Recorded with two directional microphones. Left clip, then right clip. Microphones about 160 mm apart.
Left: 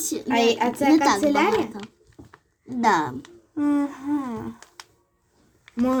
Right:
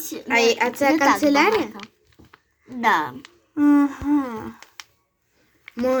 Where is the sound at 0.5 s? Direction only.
20° right (ahead or behind).